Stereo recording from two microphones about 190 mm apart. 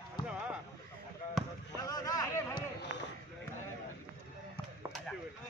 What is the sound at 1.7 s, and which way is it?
Speech, 20° left (ahead or behind).